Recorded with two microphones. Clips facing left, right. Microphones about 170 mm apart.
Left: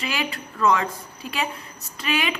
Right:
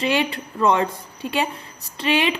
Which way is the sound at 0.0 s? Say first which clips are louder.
Right 7 dB; 30° right (ahead or behind).